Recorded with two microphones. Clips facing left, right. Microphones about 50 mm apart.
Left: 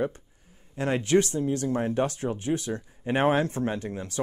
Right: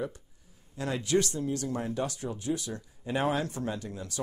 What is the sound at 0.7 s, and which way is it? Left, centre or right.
Speech, left.